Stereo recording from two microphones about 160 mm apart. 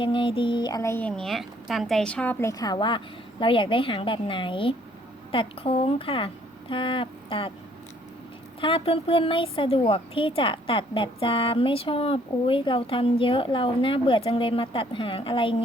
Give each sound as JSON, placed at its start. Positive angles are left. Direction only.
{"t": 0.0, "sound": "a woman's voice", "side_deg": 30}
{"t": 8.6, "sound": "a woman's voice", "side_deg": 35}